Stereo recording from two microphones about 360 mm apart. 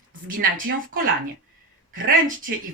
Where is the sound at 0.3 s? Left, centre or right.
Right.